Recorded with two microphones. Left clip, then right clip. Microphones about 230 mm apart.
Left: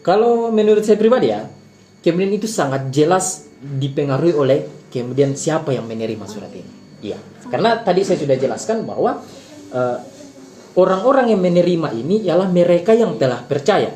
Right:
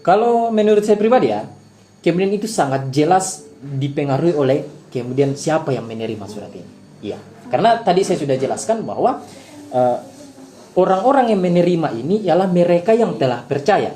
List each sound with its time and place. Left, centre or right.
0.0 s speech: right
7.5 s speech: right
10.8 s speech: centre